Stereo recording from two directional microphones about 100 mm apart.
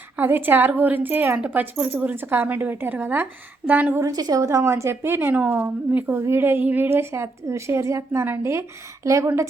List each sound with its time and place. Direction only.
0.2 s a woman's voice: 20° right (ahead or behind)
4.0 s a woman's voice: 40° right (ahead or behind)